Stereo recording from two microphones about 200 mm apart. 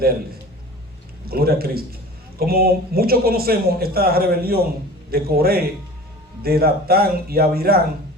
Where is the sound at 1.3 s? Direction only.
50° right (ahead or behind).